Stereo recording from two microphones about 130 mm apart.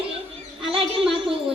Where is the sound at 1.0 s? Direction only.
Centre (ahead or behind).